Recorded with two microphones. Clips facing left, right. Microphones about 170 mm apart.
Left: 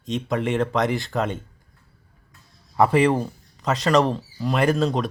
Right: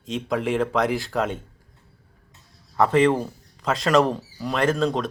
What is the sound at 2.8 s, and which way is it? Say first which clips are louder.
Speech: even; centre (ahead or behind).